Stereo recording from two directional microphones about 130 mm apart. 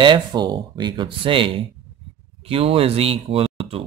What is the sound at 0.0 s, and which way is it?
Speech, 35° right (ahead or behind).